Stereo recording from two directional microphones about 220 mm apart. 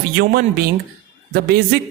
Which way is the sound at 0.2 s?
45° right (ahead or behind).